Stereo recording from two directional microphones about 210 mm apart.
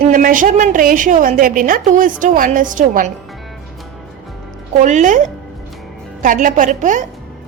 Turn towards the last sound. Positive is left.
turn(degrees=-35)  # may be behind; listen again after turning